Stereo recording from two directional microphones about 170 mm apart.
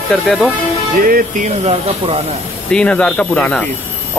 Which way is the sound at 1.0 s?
55° right (ahead or behind).